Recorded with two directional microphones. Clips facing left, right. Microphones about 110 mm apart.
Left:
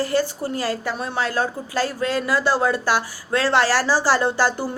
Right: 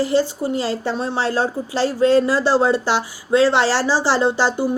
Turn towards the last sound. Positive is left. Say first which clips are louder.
# right 2 dB
turn(degrees=-20)  # may be behind; listen again after turning